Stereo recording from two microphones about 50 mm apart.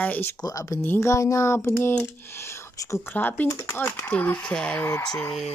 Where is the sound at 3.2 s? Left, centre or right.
Left.